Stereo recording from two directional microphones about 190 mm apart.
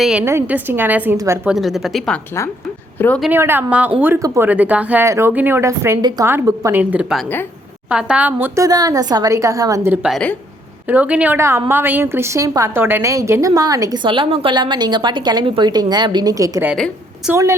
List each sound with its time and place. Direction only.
0.0 s speech: 5° right (ahead or behind)
1.5 s a woman's voice: centre (ahead or behind)
3.2 s a woman's voice: 10° right (ahead or behind)
16.6 s a woman's voice: centre (ahead or behind)